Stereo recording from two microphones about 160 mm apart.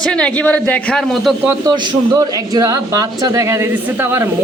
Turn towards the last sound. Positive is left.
turn(degrees=-15)  # may be behind; listen again after turning